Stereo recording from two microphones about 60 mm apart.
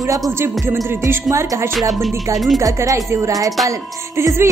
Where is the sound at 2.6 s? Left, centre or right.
Right.